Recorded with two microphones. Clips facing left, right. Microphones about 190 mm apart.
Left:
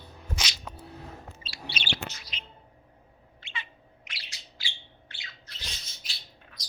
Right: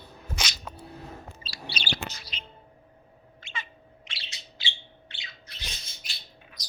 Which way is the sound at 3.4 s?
45° right (ahead or behind).